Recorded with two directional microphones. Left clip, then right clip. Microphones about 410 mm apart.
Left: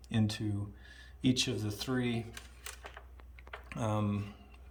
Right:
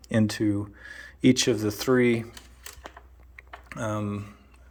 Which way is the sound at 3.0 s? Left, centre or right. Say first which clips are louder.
Right 3 dB; left.